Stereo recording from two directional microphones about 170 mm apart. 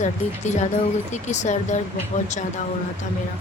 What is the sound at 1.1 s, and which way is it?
Speech, 45° left (ahead or behind).